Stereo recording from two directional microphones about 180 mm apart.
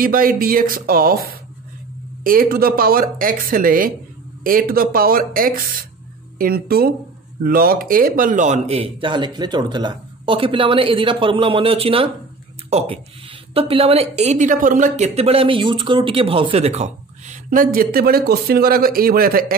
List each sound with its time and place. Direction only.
0.0 s speech: 50° right (ahead or behind)